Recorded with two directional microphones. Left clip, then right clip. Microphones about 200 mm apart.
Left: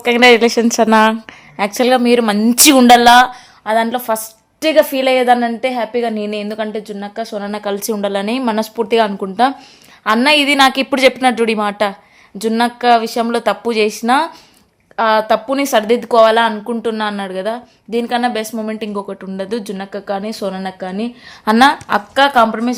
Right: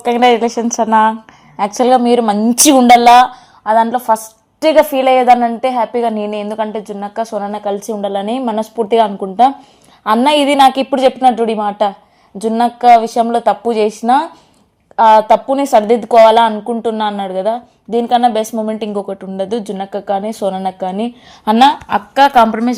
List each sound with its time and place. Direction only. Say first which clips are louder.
0.2 s speech: left 2 dB; 20° left (ahead or behind)
0.4 s a woman's voice: left 3 dB; 35° left (ahead or behind)
1.5 s a woman's voice: right 2 dB; 5° left (ahead or behind)
4.9 s a woman's voice: right 3 dB; 15° left (ahead or behind)
5.4 s a woman's voice: right 3 dB; centre (ahead or behind)
6.2 s a woman's voice: right 3 dB; 20° left (ahead or behind)
6.8 s a woman's voice: right 4 dB; centre (ahead or behind)
7.4 s a woman's voice: right 1 dB; 5° left (ahead or behind)
10.9 s a woman's voice: right 1 dB; 10° left (ahead or behind); by 21.5 s 10° right (ahead or behind)
21.5 s a woman's voice: right 1 dB; centre (ahead or behind)
22.1 s a woman's voice: right 3 dB; 10° right (ahead or behind)